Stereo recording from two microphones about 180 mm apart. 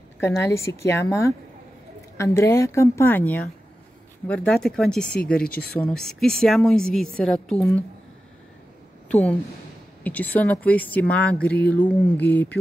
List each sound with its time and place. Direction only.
0.2 s a woman's voice: 15° left (ahead or behind)
9.1 s a woman's voice: 5° left (ahead or behind)